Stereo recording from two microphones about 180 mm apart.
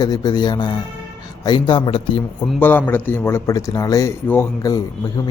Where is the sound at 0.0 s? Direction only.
20° left (ahead or behind).